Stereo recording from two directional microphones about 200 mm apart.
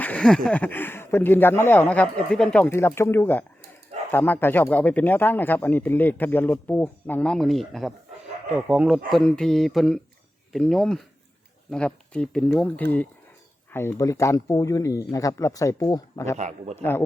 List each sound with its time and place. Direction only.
0.0 s speech: 5° left (ahead or behind)
16.4 s a man's voice: 35° right (ahead or behind)
16.7 s speech: 10° left (ahead or behind)